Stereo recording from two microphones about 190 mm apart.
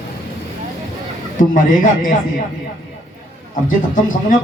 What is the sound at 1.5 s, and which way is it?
Speech, 45° left (ahead or behind).